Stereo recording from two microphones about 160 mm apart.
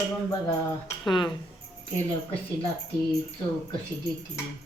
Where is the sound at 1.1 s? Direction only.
30° left (ahead or behind).